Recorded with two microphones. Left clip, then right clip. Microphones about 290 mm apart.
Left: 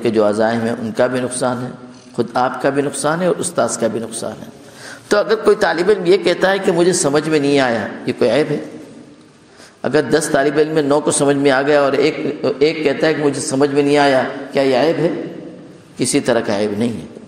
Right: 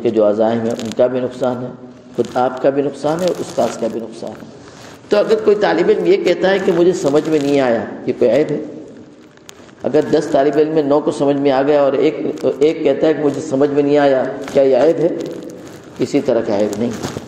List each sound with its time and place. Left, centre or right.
0.0 s a man's voice: left
9.8 s a man's voice: left
16.0 s a man's voice: left